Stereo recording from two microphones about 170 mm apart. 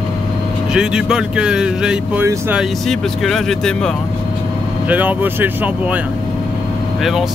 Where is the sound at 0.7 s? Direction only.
5° right (ahead or behind).